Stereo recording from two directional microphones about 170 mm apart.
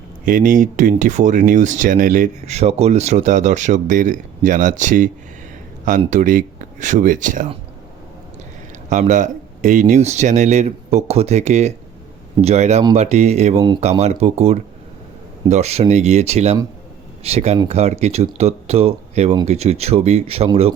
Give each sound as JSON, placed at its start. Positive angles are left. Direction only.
{"t": 0.3, "sound": "speech", "side_deg": -50}
{"t": 8.9, "sound": "speech", "side_deg": -45}